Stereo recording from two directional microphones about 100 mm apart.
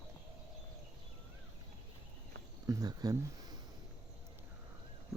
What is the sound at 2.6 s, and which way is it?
Speech, 40° right (ahead or behind).